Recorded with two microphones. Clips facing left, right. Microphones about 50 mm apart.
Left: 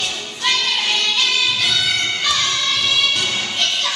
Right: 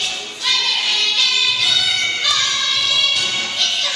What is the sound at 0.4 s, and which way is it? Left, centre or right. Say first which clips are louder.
Music: left 1 dB; left.